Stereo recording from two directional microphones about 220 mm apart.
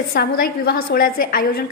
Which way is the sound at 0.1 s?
45° left (ahead or behind).